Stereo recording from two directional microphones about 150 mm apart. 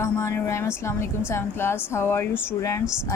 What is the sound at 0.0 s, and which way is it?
Speech, 20° left (ahead or behind).